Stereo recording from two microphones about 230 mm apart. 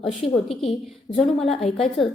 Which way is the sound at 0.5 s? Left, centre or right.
Left.